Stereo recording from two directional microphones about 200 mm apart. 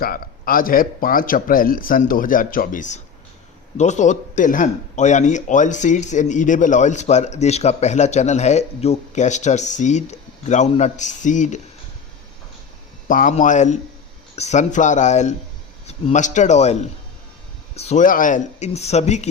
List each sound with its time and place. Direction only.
0.0 s a man's voice: 45° left (ahead or behind)
13.1 s speech: 40° left (ahead or behind)
17.7 s speech: 35° left (ahead or behind)